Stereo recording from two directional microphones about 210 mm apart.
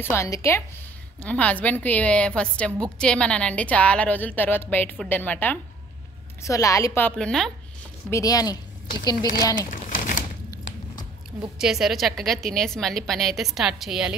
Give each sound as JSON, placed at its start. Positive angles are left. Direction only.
{"t": 0.0, "sound": "a woman's voice", "side_deg": 10}
{"t": 8.1, "sound": "a woman's voice", "side_deg": 15}
{"t": 9.7, "sound": "crumpling", "side_deg": 40}
{"t": 11.5, "sound": "a woman's voice", "side_deg": 0}